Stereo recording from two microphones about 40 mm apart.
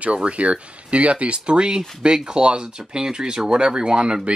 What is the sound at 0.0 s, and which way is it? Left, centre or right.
Speech, right.